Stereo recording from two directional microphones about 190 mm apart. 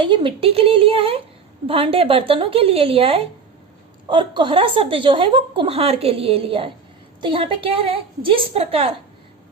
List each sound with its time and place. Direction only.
0.0 s a woman's voice: 25° right (ahead or behind)